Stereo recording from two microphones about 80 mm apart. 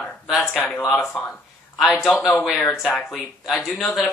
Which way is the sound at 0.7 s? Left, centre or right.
Centre.